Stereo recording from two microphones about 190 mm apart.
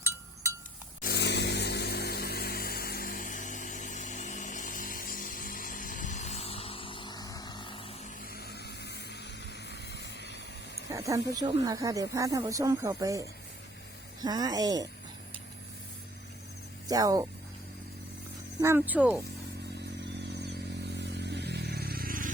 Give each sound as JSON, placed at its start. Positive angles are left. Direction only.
{"t": 1.0, "sound": "a sound", "side_deg": 60}
{"t": 8.2, "sound": "vehicle", "side_deg": 55}
{"t": 10.9, "sound": "speech", "side_deg": -15}
{"t": 16.9, "sound": "speech", "side_deg": -20}
{"t": 18.6, "sound": "speech", "side_deg": -10}
{"t": 20.4, "sound": "a sound", "side_deg": -65}